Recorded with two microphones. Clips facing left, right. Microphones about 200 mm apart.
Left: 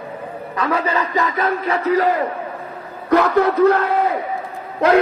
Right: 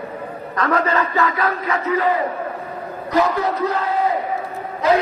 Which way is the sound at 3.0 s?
60° left (ahead or behind).